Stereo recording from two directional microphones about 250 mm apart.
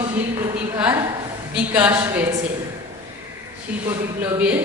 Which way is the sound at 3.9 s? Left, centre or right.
Centre.